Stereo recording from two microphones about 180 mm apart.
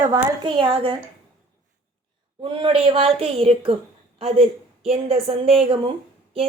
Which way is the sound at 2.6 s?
30° right (ahead or behind).